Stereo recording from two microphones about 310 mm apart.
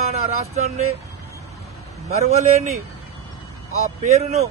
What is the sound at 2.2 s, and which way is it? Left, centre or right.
Speech, right.